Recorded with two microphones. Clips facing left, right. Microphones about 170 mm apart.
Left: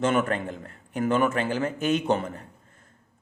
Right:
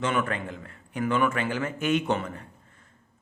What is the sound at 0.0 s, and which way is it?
A man's voice, 45° left (ahead or behind).